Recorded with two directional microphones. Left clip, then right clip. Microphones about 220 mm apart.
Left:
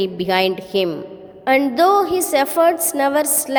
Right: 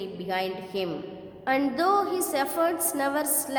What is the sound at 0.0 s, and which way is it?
A woman's voice, 40° left (ahead or behind).